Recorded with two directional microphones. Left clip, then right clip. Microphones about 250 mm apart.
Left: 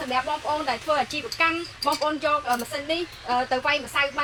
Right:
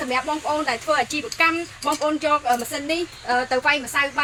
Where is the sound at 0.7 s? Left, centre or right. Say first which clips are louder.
Right 2 dB; right.